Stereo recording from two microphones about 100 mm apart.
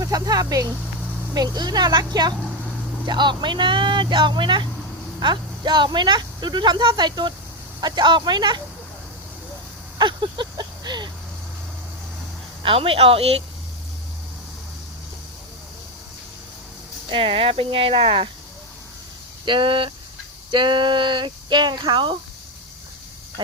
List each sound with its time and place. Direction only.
0.0 s speech: 40° right (ahead or behind)
10.0 s a sound: 50° right (ahead or behind)
12.6 s speech: 65° right (ahead or behind)
17.1 s speech: 65° right (ahead or behind)
19.5 s speech: 55° right (ahead or behind)